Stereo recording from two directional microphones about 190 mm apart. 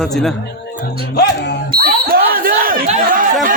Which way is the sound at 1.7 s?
50° right (ahead or behind).